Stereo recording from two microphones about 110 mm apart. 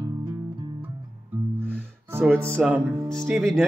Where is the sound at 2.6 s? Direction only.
5° right (ahead or behind).